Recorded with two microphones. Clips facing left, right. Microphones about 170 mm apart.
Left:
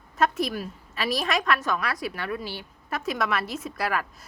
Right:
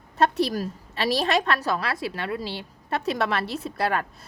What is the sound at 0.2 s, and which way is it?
Speech, 35° right (ahead or behind).